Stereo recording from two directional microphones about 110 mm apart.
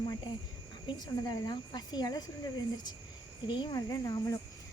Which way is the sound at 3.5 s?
45° left (ahead or behind).